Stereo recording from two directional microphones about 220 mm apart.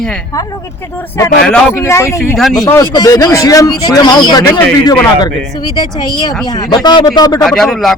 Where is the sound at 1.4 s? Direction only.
5° left (ahead or behind); by 7.4 s 20° left (ahead or behind).